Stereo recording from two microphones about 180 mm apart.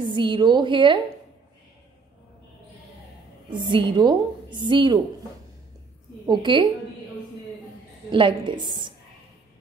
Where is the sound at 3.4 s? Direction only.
25° right (ahead or behind).